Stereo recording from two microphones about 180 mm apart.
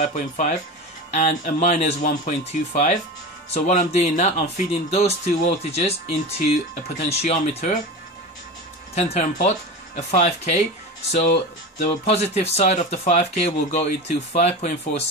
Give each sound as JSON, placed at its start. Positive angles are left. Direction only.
{"t": 0.0, "sound": "speech", "side_deg": 40}
{"t": 8.9, "sound": "speech", "side_deg": 40}
{"t": 11.8, "sound": "speech", "side_deg": 35}